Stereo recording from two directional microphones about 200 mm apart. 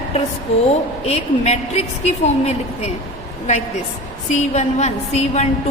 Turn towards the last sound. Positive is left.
turn(degrees=35)  # may be behind; listen again after turning